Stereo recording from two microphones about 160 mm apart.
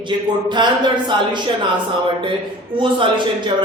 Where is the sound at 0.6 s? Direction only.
30° right (ahead or behind).